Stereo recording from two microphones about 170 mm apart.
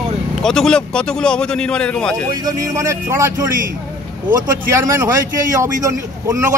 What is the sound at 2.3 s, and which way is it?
Speech, 20° right (ahead or behind).